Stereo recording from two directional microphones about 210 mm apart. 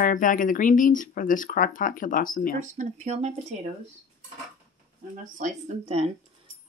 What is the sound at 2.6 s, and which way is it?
Speech, 35° right (ahead or behind).